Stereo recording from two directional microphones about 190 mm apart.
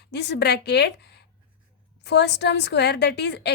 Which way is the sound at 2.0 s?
65° left (ahead or behind).